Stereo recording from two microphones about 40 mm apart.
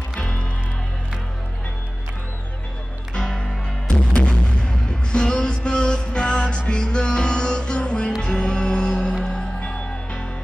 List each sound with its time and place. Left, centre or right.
0.1 s music: left
3.9 s music: left